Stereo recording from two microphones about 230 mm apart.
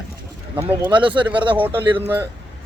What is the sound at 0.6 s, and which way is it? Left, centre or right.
Speech, centre.